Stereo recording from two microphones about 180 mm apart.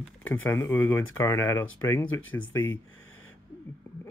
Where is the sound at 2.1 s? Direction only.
90° left.